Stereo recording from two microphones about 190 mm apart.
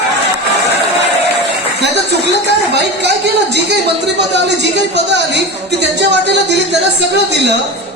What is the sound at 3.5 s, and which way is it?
Speech, 65° right (ahead or behind).